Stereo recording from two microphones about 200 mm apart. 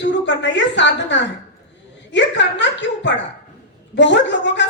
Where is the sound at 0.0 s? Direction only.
65° left (ahead or behind).